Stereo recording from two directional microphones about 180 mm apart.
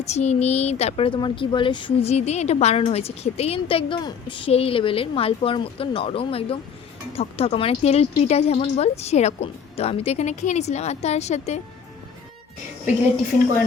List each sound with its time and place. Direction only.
0.0 s speech: 40° left (ahead or behind)